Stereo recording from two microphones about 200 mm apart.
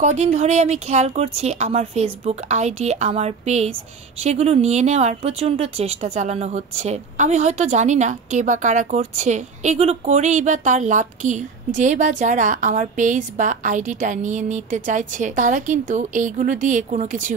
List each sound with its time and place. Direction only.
0.0 s speech: 35° right (ahead or behind)